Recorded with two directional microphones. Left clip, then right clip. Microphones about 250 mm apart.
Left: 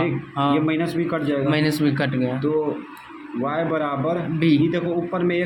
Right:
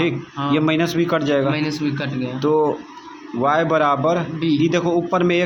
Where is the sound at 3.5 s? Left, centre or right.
Right.